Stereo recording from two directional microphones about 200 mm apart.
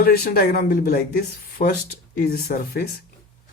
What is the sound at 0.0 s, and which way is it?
Speech, 50° left (ahead or behind).